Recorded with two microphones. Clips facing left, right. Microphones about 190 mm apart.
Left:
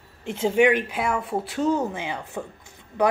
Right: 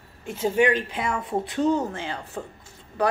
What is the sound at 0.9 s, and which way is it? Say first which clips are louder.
Speech: left 1 dB; 5° left (ahead or behind).